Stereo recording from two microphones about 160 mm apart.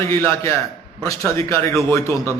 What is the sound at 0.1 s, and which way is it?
A man's voice, 15° left (ahead or behind).